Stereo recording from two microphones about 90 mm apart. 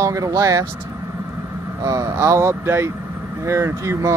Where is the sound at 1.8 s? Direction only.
40° right (ahead or behind).